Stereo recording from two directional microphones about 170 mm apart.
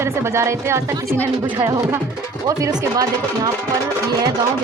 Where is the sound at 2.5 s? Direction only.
20° right (ahead or behind).